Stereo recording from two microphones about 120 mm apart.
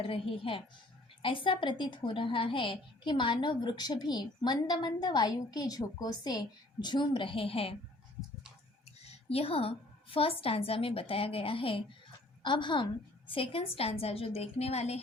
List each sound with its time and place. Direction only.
0.0 s a woman's voice: 50° left (ahead or behind)
9.0 s a woman's voice: 55° left (ahead or behind)